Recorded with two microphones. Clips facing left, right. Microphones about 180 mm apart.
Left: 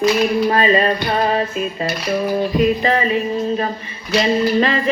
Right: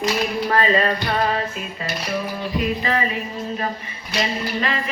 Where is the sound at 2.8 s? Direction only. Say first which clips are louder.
Left 5 dB; 25° left (ahead or behind).